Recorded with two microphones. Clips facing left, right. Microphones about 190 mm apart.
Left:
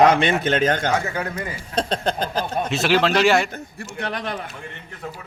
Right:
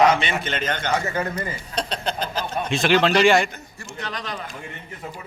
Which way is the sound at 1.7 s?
50° left (ahead or behind).